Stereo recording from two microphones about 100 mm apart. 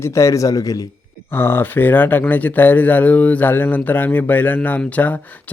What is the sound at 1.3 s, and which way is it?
Speech, 20° left (ahead or behind).